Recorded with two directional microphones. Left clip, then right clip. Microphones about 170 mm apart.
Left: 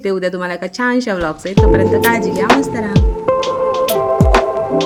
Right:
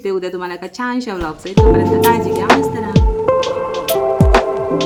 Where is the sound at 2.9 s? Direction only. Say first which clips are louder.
Right 2 dB; centre (ahead or behind).